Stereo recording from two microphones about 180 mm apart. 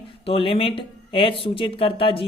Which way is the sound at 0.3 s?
30° left (ahead or behind).